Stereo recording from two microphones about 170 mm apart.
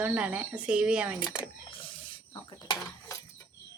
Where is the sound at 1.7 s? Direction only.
30° left (ahead or behind).